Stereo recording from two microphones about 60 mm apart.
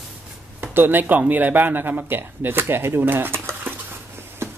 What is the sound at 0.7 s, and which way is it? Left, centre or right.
Speech, right.